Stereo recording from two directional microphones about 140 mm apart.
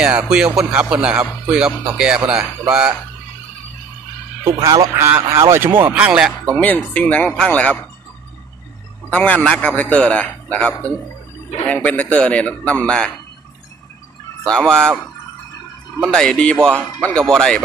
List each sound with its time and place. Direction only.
0.0 s speech: 5° right (ahead or behind)
4.6 s a man's voice: 25° right (ahead or behind); by 6.3 s 10° right (ahead or behind)
6.6 s a man's voice: 10° left (ahead or behind)
9.1 s a man's voice: 10° left (ahead or behind)
14.4 s a man's voice: 5° left (ahead or behind)
16.1 s a man's voice: 5° left (ahead or behind)